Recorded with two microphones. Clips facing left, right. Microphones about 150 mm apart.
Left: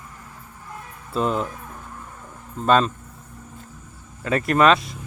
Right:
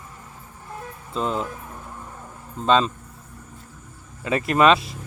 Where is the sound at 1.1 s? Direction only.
5° left (ahead or behind).